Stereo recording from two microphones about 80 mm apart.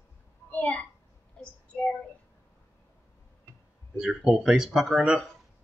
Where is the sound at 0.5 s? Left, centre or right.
Centre.